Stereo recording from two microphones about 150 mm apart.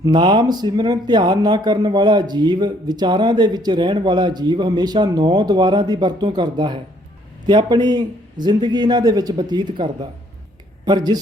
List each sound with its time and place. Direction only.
0.0 s speech: 30° right (ahead or behind)